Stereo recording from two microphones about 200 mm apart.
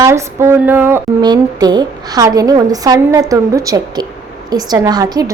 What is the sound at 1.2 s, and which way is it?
A woman's voice, 20° right (ahead or behind).